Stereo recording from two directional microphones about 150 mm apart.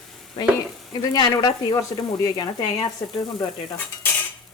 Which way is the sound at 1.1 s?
30° left (ahead or behind).